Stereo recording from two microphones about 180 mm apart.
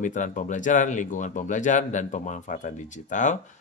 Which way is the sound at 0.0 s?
45° left (ahead or behind).